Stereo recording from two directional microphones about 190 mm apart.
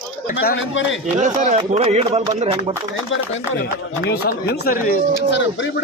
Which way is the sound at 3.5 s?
55° left (ahead or behind).